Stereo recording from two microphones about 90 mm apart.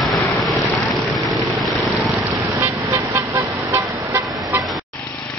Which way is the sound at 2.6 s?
25° right (ahead or behind).